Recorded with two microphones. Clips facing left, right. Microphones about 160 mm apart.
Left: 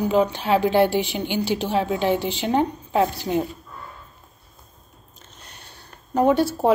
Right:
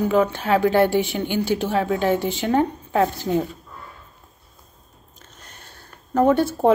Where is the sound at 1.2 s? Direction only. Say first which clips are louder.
Right 2 dB; 15° left (ahead or behind).